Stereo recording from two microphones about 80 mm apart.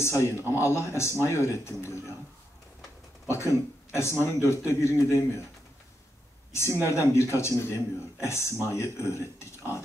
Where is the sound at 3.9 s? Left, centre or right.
Left.